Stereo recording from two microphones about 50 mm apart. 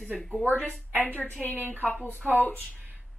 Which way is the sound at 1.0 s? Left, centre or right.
Left.